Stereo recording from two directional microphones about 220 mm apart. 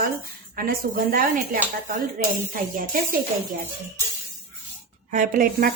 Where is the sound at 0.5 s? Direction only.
40° right (ahead or behind).